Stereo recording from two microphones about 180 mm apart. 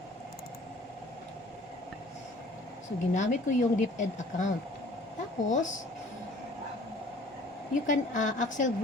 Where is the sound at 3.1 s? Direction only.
40° left (ahead or behind).